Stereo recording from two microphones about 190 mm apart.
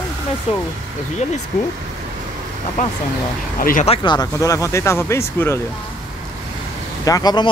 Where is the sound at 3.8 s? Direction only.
25° left (ahead or behind).